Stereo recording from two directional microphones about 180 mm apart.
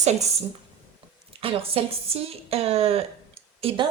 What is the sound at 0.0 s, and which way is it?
Speech, 40° right (ahead or behind).